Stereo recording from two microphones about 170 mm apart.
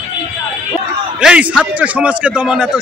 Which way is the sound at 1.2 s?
5° right (ahead or behind).